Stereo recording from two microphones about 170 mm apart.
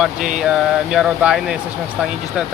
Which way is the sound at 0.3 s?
5° right (ahead or behind).